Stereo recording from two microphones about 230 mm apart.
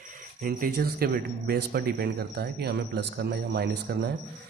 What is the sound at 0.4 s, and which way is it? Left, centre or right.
Speech, right.